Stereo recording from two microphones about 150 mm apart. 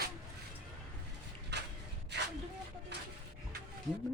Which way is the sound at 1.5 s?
90° right.